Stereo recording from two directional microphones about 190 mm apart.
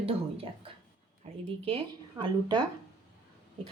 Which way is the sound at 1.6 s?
25° right (ahead or behind).